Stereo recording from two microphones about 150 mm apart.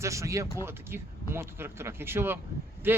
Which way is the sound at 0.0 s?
20° right (ahead or behind).